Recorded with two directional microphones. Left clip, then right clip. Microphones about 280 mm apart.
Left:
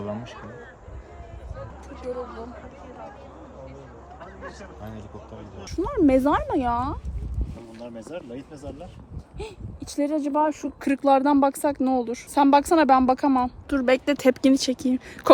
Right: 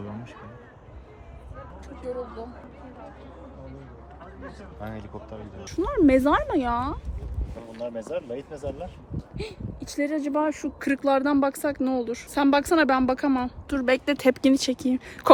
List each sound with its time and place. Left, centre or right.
5.6 s speech: centre
7.8 s speech: right
9.4 s speech: centre
13.7 s speech: centre